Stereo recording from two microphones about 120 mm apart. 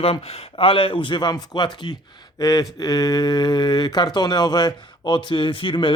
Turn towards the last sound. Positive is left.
turn(degrees=45)  # may be behind; listen again after turning